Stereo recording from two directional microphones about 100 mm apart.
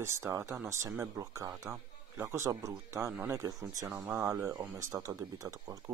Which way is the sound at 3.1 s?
20° right (ahead or behind).